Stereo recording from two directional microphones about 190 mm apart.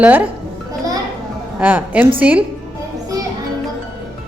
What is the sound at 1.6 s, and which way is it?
Speech, 10° right (ahead or behind).